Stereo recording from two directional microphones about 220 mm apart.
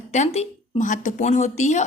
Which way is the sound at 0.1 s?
30° left (ahead or behind).